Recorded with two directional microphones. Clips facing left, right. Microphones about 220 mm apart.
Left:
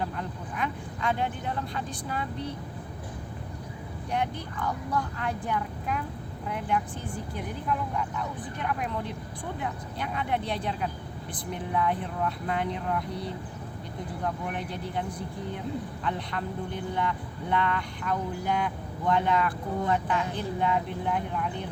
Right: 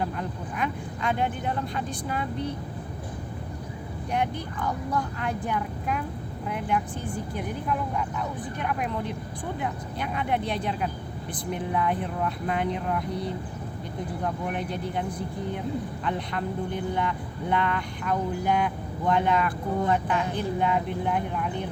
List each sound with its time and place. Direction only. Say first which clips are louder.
0.0 s speech: right 3 dB; 15° right (ahead or behind)
4.1 s speech: right 2 dB; 15° right (ahead or behind)
14.5 s speech: right 3 dB; 15° right (ahead or behind)
16.0 s speech: right 2 dB; 15° right (ahead or behind)